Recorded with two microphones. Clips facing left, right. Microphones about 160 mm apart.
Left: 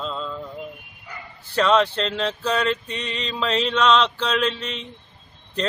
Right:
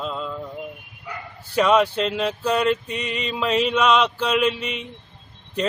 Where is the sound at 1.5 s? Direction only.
10° right (ahead or behind).